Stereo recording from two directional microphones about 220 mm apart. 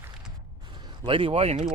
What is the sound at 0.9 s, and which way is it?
Speech, 25° right (ahead or behind).